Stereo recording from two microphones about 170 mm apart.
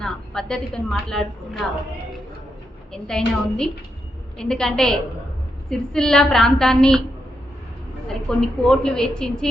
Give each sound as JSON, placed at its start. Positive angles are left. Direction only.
{"t": 0.0, "sound": "a woman's voice", "side_deg": 5}
{"t": 2.9, "sound": "a woman's voice", "side_deg": 5}
{"t": 8.0, "sound": "a woman's voice", "side_deg": 5}